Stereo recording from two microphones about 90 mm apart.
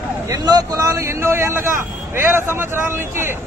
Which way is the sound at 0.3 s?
45° right (ahead or behind).